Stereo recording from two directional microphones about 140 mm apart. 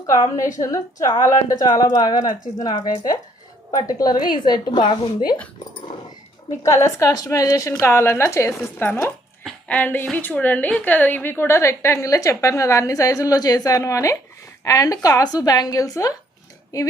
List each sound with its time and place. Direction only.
0.3 s a woman's voice: 25° left (ahead or behind)
6.7 s a woman's voice: 20° left (ahead or behind)
9.4 s a sound: 10° left (ahead or behind)
10.1 s a woman's voice: 10° left (ahead or behind)